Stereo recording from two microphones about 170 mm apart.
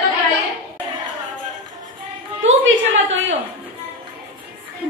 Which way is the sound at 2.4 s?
90° right.